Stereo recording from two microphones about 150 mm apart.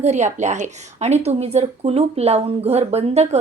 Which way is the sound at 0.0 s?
50° right (ahead or behind).